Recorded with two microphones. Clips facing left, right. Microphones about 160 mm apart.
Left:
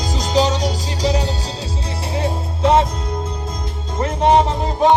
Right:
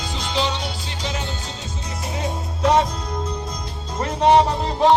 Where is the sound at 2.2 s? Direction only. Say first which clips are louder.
Left 4 dB; 25° left (ahead or behind).